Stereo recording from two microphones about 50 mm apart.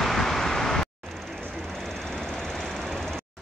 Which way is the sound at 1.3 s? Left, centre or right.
Centre.